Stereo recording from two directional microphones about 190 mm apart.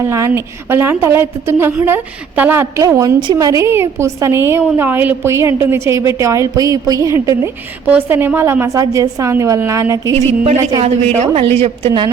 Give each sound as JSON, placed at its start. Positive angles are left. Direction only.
{"t": 0.0, "sound": "a woman's voice", "side_deg": -15}
{"t": 10.8, "sound": "a woman's voice", "side_deg": -35}